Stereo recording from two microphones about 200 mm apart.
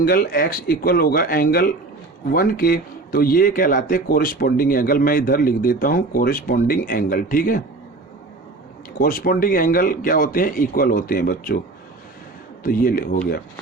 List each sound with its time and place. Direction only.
0.0 s speech: 45° left (ahead or behind)
9.0 s speech: 45° left (ahead or behind)
12.6 s speech: 45° left (ahead or behind)